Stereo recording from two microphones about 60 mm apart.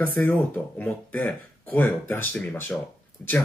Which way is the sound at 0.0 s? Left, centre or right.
Left.